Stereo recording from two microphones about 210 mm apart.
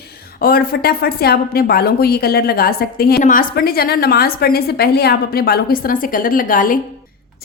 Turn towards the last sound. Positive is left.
turn(degrees=40)  # may be behind; listen again after turning